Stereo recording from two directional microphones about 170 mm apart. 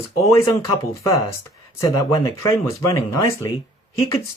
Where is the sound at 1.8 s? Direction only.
20° left (ahead or behind).